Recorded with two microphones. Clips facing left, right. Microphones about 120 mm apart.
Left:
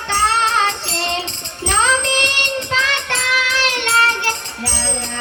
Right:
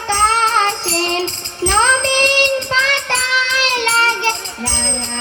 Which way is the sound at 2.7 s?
35° right (ahead or behind).